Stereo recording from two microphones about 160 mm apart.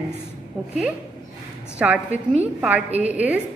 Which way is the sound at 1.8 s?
10° right (ahead or behind).